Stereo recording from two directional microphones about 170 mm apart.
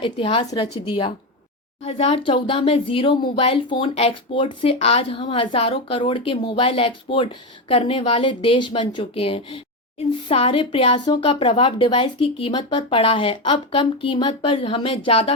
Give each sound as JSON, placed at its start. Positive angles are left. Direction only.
{"t": 0.0, "sound": "speech", "side_deg": 30}